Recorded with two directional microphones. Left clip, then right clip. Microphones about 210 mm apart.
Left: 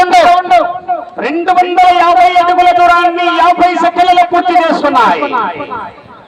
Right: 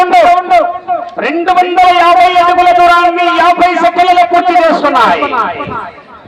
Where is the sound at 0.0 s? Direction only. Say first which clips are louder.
Even; 30° right (ahead or behind).